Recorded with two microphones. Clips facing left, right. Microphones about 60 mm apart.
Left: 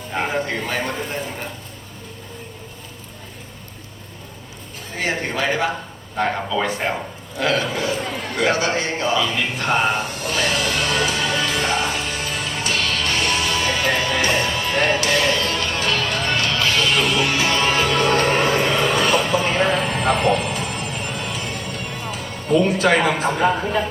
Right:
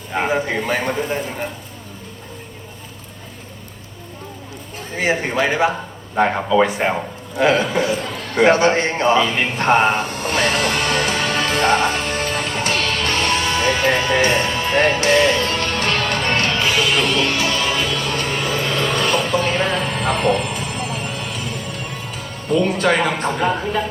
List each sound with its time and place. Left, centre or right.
0.1 s a man's voice: centre
5.0 s a man's voice: centre
8.4 s a sound: right
16.6 s music: centre
17.3 s music: left
17.7 s music: left
18.2 s music: left
18.7 s a sound: centre